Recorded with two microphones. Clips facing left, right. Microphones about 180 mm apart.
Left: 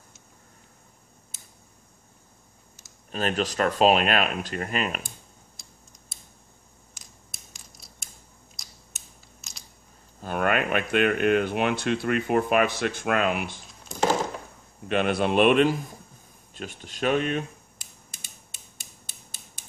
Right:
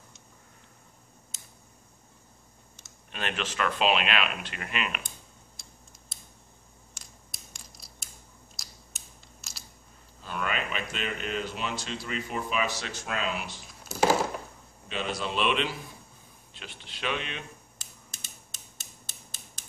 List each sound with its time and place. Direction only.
2.7 s speech: 40° left (ahead or behind)
5.6 s a sound: centre (ahead or behind)
7.0 s a sound: centre (ahead or behind)
7.5 s creak: centre (ahead or behind)
8.5 s crushing: centre (ahead or behind)
10.2 s speech: 55° left (ahead or behind)
13.8 s a sound: 5° right (ahead or behind)
14.9 s speech: 60° left (ahead or behind)
18.2 s creak: 10° left (ahead or behind)